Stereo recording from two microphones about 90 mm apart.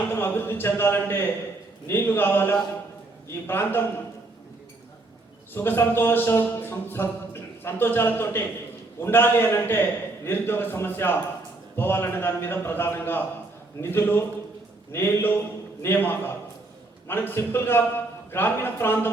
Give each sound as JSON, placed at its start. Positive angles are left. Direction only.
{"t": 0.1, "sound": "a man's voice", "side_deg": 25}
{"t": 5.5, "sound": "a man's voice", "side_deg": 25}